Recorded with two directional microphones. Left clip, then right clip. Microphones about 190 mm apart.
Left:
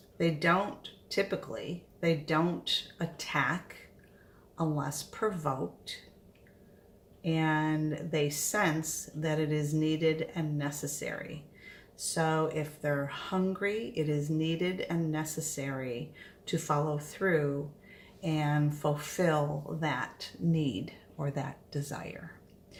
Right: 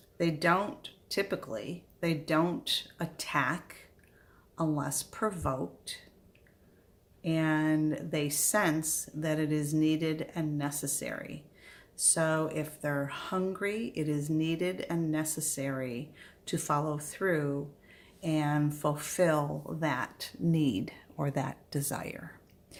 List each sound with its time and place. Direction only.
0.2 s speech: 40° right (ahead or behind)
7.2 s speech: 40° right (ahead or behind)